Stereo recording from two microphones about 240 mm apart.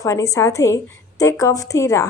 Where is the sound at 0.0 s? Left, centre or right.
Centre.